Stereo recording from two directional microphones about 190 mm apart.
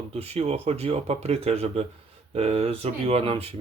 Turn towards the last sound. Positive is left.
turn(degrees=-30)  # may be behind; listen again after turning